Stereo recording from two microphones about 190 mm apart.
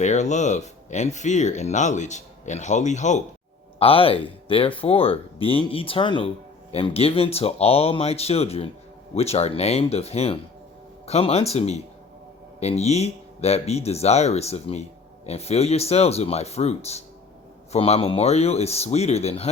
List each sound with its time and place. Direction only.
0.0 s speech: 40° left (ahead or behind)